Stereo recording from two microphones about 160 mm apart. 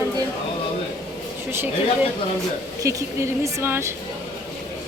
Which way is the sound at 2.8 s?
20° right (ahead or behind).